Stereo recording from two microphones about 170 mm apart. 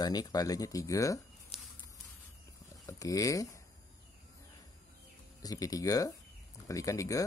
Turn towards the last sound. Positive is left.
turn(degrees=20)  # may be behind; listen again after turning